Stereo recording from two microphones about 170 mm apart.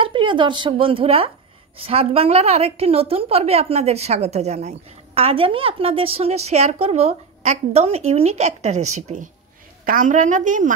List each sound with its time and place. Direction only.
0.0 s a woman's voice: 30° right (ahead or behind); by 10.7 s 50° right (ahead or behind)